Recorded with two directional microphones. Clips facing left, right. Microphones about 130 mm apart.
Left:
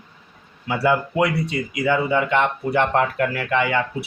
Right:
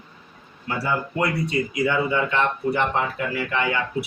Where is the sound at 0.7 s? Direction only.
90° left.